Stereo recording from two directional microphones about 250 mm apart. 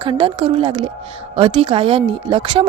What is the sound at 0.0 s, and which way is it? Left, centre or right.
A woman's voice, right.